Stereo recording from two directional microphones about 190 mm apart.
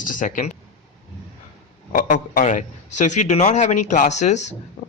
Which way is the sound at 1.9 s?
45° left (ahead or behind).